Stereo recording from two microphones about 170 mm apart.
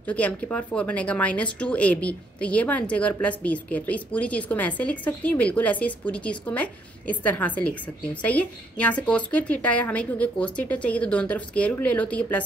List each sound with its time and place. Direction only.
0.0 s speech: 10° left (ahead or behind)